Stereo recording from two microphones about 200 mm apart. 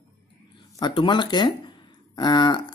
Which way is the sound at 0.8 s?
25° left (ahead or behind).